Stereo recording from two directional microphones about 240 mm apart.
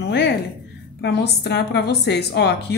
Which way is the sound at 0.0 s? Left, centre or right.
Left.